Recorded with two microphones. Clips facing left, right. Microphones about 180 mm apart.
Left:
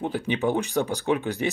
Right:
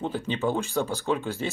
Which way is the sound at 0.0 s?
15° left (ahead or behind).